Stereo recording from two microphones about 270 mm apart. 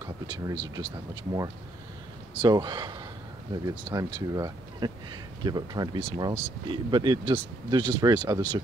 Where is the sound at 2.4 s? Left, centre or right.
Centre.